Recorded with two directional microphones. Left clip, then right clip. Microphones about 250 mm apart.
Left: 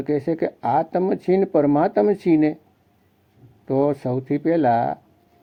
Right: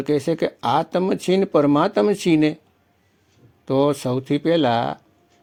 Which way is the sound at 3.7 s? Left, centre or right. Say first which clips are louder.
Right 1 dB; right.